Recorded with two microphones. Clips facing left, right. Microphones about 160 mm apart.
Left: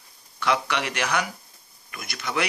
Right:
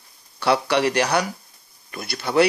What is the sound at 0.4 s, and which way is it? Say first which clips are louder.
Speech: right 6 dB; 35° right (ahead or behind).